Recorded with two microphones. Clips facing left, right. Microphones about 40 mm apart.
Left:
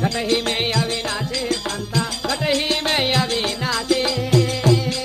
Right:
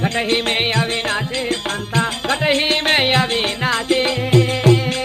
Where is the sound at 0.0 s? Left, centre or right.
Right.